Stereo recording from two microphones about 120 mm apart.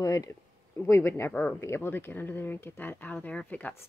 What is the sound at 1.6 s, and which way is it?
A woman's voice, 20° left (ahead or behind).